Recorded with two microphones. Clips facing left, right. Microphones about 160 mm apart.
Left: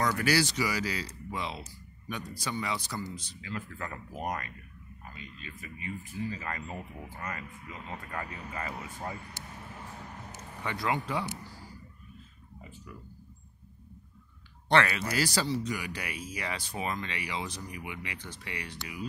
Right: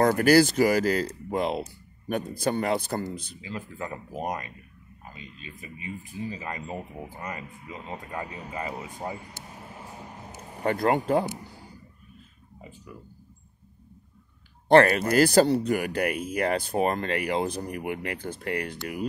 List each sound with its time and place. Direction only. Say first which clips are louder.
0.0 s speech: right 9 dB; 50° right (ahead or behind)
3.3 s speech: right 3 dB; 20° right (ahead or behind)
9.8 s a sound: right 3 dB; 15° right (ahead or behind)
10.6 s speech: right 8 dB; 45° right (ahead or behind)
11.3 s a sound: right 3 dB; 20° right (ahead or behind)
14.7 s speech: right 9 dB; 45° right (ahead or behind)